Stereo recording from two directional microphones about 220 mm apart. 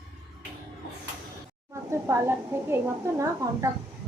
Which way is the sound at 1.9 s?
10° right (ahead or behind).